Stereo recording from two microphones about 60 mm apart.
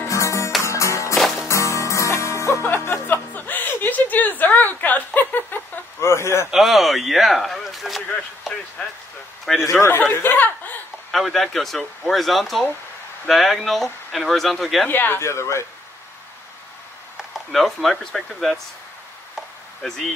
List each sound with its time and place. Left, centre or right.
0.0 s music: left
1.1 s music: centre
1.5 s music: left
3.1 s chuckle: left
5.9 s a sound: left
6.5 s speech: centre
8.5 s a sound: centre
9.7 s speech: left
11.1 s speech: centre
14.9 s speech: left
15.1 s speech: left
17.2 s speech: centre
19.8 s speech: centre